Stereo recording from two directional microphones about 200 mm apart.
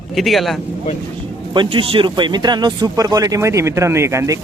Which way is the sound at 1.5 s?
25° right (ahead or behind).